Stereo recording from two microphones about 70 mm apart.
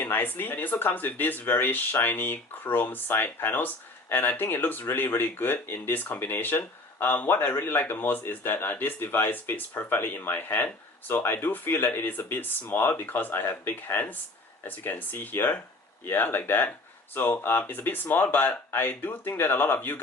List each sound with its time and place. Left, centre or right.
0.0 s speech: left